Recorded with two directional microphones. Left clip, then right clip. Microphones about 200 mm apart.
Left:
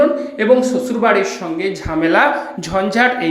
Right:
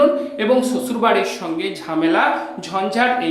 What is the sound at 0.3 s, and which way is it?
Speech, 10° left (ahead or behind).